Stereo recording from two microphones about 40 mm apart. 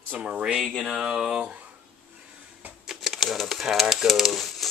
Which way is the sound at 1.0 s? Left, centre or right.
Centre.